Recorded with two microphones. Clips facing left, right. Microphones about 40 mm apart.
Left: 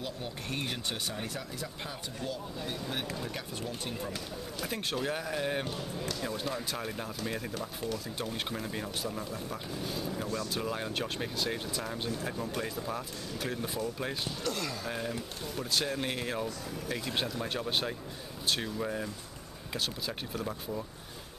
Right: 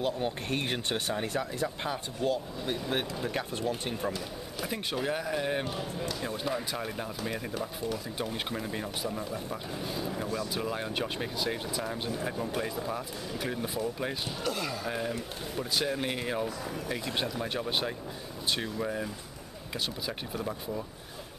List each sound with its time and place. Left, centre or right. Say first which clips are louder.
0.0 s speech: right 8 dB; right
4.6 s speech: right 2 dB; centre